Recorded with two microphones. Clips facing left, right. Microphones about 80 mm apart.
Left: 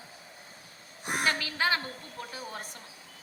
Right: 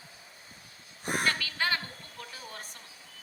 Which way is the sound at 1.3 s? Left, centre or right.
Centre.